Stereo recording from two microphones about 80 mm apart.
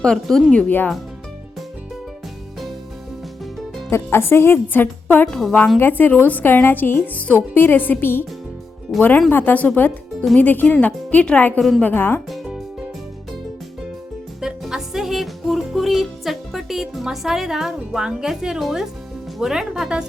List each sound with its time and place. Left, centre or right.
0.0 s a woman's voice: centre
3.8 s a woman's voice: left
5.3 s a woman's voice: centre
5.8 s a woman's voice: left
14.4 s music: centre
19.4 s speech: centre